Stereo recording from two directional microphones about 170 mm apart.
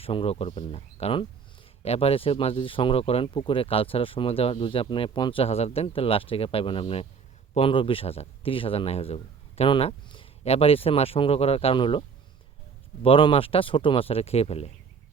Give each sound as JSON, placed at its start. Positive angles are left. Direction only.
{"t": 0.0, "sound": "speech", "side_deg": 35}